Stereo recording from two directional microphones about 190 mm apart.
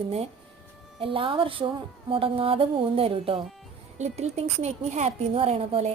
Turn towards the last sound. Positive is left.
turn(degrees=-30)  # may be behind; listen again after turning